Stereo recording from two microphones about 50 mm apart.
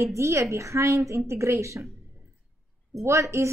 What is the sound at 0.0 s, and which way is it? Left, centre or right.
A woman's voice, right.